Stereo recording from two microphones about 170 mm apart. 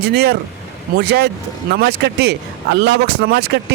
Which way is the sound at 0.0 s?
70° right (ahead or behind).